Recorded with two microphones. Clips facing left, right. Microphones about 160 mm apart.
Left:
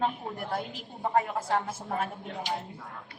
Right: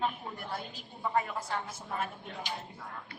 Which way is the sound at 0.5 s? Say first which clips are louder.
Left 6 dB; 55° left (ahead or behind).